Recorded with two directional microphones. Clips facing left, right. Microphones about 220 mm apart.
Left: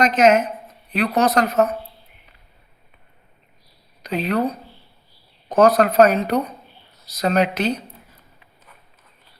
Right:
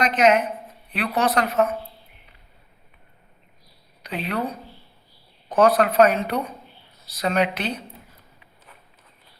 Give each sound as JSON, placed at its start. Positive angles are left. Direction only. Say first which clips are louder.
{"t": 0.0, "sound": "a man's voice", "louder": "left 3 dB", "side_deg": 45}
{"t": 4.3, "sound": "a man's voice", "louder": "left 5 dB", "side_deg": 40}